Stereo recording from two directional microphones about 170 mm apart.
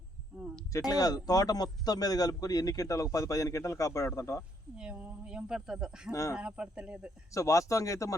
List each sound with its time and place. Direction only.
0.7 s a man's voice: 20° left (ahead or behind)
4.8 s speech: 10° right (ahead or behind)
6.1 s speech: 15° left (ahead or behind)
6.3 s speech: 5° right (ahead or behind)
7.3 s a man's voice: 20° left (ahead or behind)